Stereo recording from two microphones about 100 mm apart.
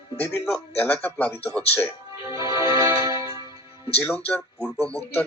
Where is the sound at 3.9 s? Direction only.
15° left (ahead or behind).